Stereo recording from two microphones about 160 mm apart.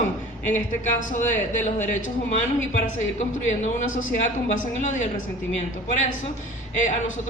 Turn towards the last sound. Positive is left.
turn(degrees=50)  # may be behind; listen again after turning